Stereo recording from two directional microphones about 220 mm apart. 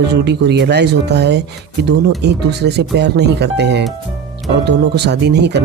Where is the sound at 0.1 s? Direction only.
50° right (ahead or behind).